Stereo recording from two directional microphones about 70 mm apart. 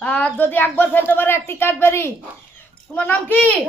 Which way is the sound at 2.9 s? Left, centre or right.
Left.